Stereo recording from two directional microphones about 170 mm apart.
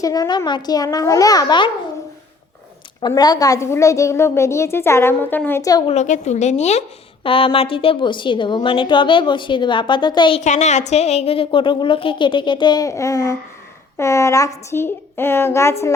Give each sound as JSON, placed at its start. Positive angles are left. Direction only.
{"t": 0.0, "sound": "a woman's voice", "side_deg": 20}
{"t": 3.0, "sound": "a woman's voice", "side_deg": 25}
{"t": 5.9, "sound": "a woman's voice", "side_deg": 45}
{"t": 10.4, "sound": "a woman's voice", "side_deg": 45}